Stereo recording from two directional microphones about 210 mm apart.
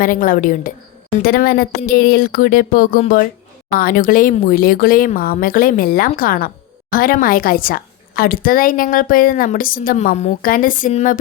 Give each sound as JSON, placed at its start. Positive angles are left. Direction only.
{"t": 0.0, "sound": "a woman's voice", "side_deg": 40}